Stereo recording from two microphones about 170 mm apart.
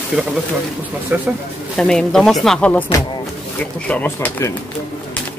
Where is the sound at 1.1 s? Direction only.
10° right (ahead or behind).